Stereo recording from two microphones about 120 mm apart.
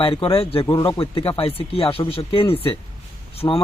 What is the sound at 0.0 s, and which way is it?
Speech, 50° left (ahead or behind).